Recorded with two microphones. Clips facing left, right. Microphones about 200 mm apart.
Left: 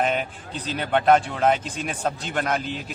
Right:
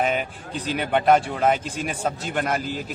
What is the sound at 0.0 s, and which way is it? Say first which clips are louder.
A man's voice: even; 5° right (ahead or behind).